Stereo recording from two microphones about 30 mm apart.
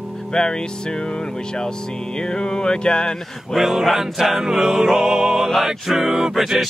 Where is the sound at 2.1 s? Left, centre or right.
Left.